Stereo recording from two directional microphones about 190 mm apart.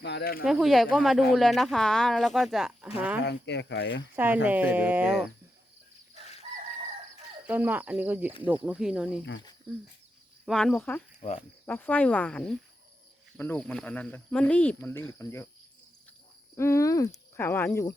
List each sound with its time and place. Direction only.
0.0 s speech: 60° left (ahead or behind)
0.4 s speech: centre (ahead or behind)
3.2 s speech: 65° left (ahead or behind)
4.1 s speech: 10° right (ahead or behind)
7.4 s speech: 10° right (ahead or behind)
10.4 s speech: centre (ahead or behind)
11.2 s speech: 35° left (ahead or behind)
11.6 s speech: 10° left (ahead or behind)
16.6 s speech: 15° left (ahead or behind)